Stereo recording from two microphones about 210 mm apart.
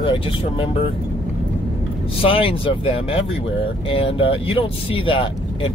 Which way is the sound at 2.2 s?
25° left (ahead or behind).